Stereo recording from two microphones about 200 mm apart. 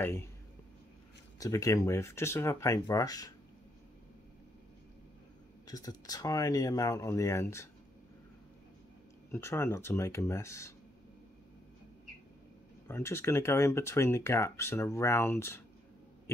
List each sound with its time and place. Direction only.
0.0 s speech: 10° left (ahead or behind)
1.4 s speech: 15° left (ahead or behind)
5.7 s speech: 20° left (ahead or behind)
9.3 s speech: 15° left (ahead or behind)
12.8 s speech: 10° left (ahead or behind)